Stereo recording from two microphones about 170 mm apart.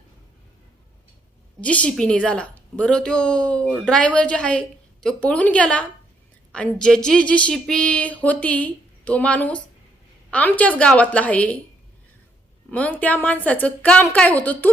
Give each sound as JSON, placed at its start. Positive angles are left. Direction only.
{"t": 1.6, "sound": "a woman's voice", "side_deg": 5}
{"t": 12.7, "sound": "speech", "side_deg": 10}